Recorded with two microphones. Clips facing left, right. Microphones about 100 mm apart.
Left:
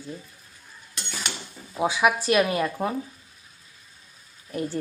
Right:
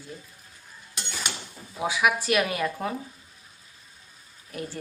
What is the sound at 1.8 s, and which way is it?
Speech, 30° left (ahead or behind).